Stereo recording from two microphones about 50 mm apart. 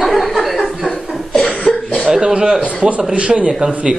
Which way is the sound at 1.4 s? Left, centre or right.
Left.